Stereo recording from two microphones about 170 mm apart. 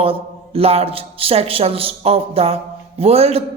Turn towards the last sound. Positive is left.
turn(degrees=-35)  # may be behind; listen again after turning